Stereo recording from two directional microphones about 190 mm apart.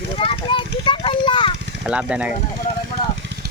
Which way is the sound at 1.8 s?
5° right (ahead or behind).